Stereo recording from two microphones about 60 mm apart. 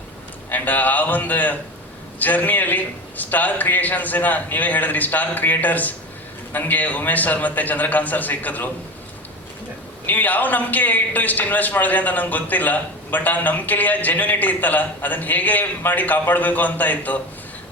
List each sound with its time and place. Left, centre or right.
0.5 s a man's voice: left
10.1 s a man's voice: left